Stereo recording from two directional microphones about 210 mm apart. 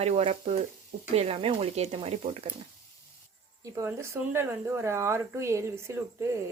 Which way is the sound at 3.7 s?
10° right (ahead or behind).